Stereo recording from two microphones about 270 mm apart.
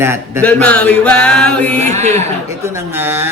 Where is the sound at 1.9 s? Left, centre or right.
Right.